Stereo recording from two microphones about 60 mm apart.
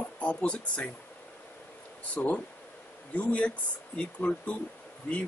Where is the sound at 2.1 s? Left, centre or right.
Left.